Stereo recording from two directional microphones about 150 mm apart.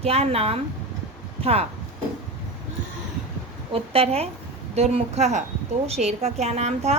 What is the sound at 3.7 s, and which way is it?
A woman's voice, 40° right (ahead or behind).